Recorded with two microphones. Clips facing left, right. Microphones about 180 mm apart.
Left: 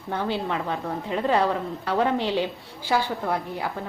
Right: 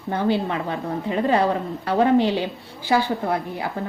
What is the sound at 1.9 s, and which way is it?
Speech, 15° right (ahead or behind).